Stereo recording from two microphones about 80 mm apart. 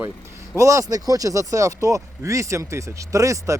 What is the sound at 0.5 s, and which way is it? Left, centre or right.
Speech, right.